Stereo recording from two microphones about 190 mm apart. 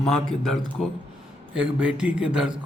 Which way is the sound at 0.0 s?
5° left (ahead or behind).